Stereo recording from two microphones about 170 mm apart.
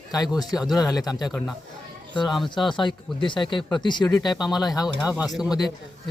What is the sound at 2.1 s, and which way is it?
Speech, 25° left (ahead or behind).